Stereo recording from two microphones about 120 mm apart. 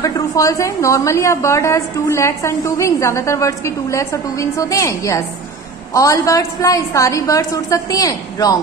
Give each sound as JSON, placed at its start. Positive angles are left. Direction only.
{"t": 0.0, "sound": "a woman's voice", "side_deg": 25}